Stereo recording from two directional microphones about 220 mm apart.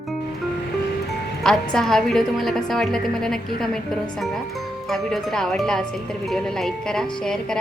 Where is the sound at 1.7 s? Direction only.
Centre (ahead or behind).